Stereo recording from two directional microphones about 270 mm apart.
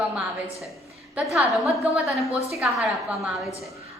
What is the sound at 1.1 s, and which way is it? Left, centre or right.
A woman's voice, centre.